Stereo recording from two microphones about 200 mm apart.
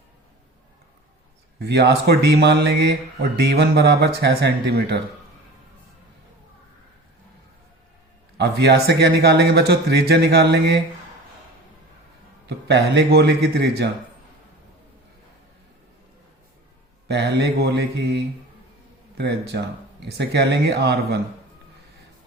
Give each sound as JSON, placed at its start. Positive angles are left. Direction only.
{"t": 1.5, "sound": "speech", "side_deg": -55}
{"t": 8.4, "sound": "speech", "side_deg": -55}
{"t": 12.5, "sound": "speech", "side_deg": -60}
{"t": 17.1, "sound": "speech", "side_deg": -55}